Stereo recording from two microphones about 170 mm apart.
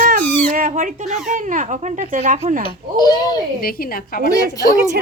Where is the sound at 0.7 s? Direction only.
50° right (ahead or behind).